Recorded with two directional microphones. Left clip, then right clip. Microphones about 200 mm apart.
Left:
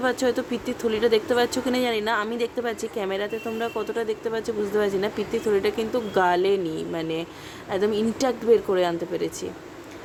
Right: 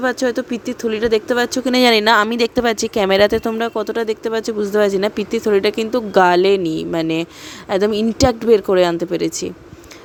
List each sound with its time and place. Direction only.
0.0 s speech: 30° right (ahead or behind)
1.8 s speech: 50° right (ahead or behind)